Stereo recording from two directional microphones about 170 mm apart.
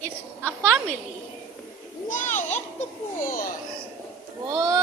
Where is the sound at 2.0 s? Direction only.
50° left (ahead or behind).